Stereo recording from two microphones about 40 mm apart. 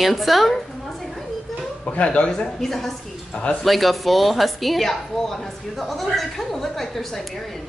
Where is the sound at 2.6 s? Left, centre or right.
Centre.